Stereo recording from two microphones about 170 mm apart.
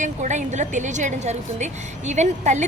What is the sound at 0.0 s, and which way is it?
A woman's voice, 45° right (ahead or behind).